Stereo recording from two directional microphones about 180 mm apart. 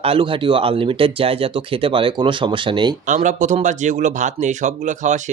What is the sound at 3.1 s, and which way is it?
Speech, 45° right (ahead or behind).